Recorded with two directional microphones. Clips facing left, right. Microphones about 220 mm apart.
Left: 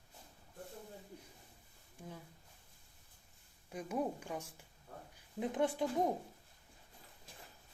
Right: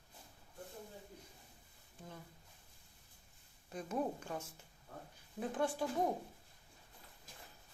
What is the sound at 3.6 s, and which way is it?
A woman's voice, 10° left (ahead or behind).